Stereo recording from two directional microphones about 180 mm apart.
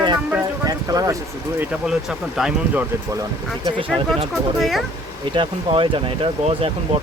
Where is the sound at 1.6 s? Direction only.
5° right (ahead or behind).